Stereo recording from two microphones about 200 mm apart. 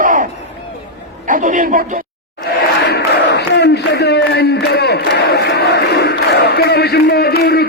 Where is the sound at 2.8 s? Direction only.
55° left (ahead or behind).